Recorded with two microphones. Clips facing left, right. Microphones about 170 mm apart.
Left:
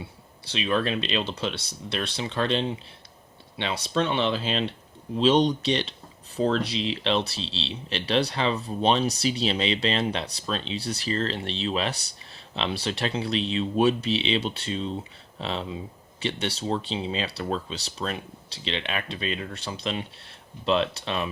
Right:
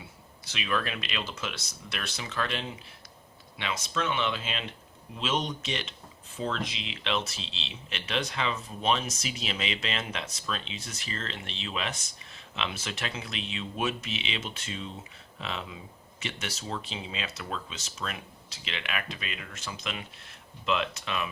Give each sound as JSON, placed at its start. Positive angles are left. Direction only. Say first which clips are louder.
{"t": 0.4, "sound": "speech", "louder": "left 6 dB", "side_deg": 30}